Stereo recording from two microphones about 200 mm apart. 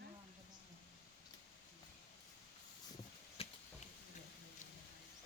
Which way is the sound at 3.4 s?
30° left (ahead or behind).